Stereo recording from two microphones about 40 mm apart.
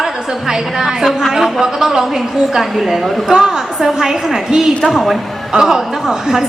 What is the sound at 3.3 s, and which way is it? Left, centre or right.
A woman's voice, centre.